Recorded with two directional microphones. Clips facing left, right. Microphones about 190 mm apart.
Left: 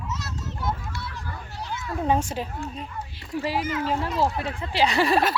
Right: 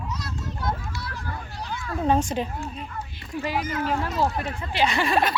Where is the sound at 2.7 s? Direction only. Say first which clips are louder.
Even; 30° left (ahead or behind).